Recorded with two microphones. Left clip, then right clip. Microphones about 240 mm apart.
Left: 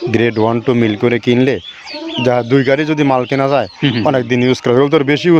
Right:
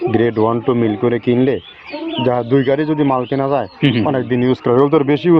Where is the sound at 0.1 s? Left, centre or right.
Left.